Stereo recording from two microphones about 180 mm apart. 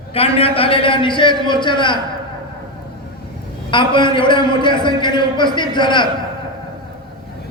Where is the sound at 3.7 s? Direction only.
25° left (ahead or behind).